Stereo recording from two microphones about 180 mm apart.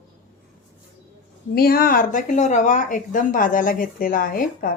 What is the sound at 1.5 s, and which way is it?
Speech, 55° left (ahead or behind).